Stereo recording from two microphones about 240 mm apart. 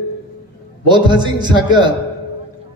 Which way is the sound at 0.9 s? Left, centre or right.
Centre.